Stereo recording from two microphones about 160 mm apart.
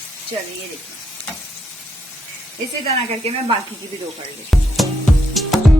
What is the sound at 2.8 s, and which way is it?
Speech, 40° right (ahead or behind).